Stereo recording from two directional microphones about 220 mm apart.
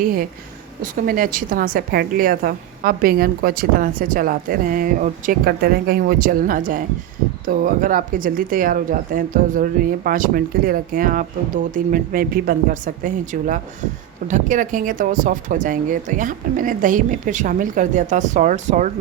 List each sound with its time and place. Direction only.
0.0 s speech: 40° right (ahead or behind)